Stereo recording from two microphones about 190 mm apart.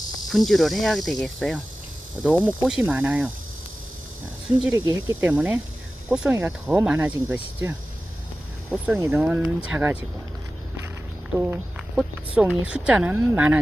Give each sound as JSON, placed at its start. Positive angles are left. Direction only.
{"t": 0.3, "sound": "speech", "side_deg": 0}
{"t": 2.2, "sound": "speech", "side_deg": -10}
{"t": 4.7, "sound": "speech", "side_deg": -15}
{"t": 8.7, "sound": "speech", "side_deg": 0}
{"t": 11.3, "sound": "speech", "side_deg": -10}